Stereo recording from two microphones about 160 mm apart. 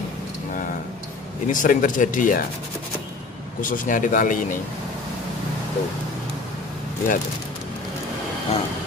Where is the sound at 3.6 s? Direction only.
55° left (ahead or behind).